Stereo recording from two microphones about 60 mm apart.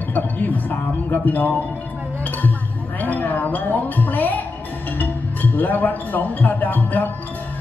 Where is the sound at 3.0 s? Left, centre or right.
Left.